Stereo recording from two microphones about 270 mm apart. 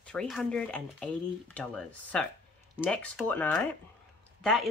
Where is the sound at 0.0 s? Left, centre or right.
Centre.